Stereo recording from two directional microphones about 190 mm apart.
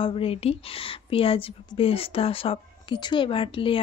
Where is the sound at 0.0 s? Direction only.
30° left (ahead or behind).